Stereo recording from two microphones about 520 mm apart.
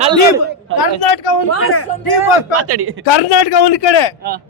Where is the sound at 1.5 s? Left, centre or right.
Left.